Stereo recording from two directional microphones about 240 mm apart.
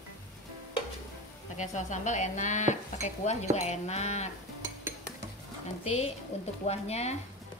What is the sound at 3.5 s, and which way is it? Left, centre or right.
Speech, left.